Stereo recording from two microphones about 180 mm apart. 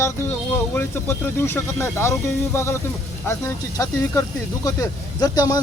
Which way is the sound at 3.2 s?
15° left (ahead or behind).